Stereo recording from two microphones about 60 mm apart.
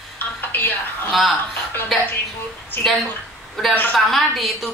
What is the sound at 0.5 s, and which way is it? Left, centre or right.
Speech, left.